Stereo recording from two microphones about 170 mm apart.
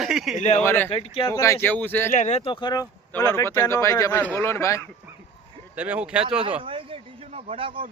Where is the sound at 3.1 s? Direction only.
15° left (ahead or behind).